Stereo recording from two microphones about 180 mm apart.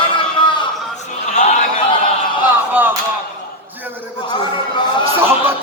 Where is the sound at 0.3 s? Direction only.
25° left (ahead or behind).